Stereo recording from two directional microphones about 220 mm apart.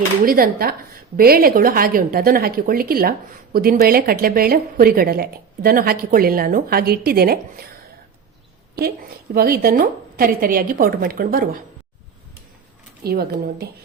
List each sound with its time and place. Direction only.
0.3 s a woman's voice: 40° right (ahead or behind)
9.3 s a woman's voice: 45° right (ahead or behind)
13.1 s a woman's voice: 45° right (ahead or behind)